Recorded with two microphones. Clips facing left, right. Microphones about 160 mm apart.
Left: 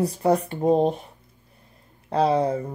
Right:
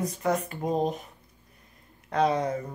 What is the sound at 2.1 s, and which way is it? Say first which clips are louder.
Speech: left 4 dB; 30° left (ahead or behind).